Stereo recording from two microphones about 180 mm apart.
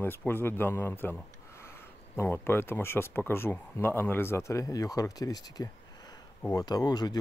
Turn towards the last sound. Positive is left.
turn(degrees=20)  # may be behind; listen again after turning